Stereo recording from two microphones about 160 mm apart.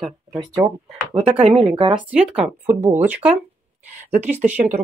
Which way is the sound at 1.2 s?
45° right (ahead or behind).